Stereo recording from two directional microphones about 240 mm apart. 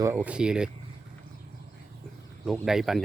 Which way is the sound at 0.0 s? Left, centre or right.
Centre.